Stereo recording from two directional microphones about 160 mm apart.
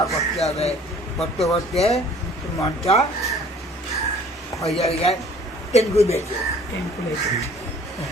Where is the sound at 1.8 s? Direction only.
40° left (ahead or behind).